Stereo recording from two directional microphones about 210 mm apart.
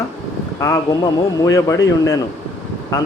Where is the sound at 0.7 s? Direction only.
15° left (ahead or behind).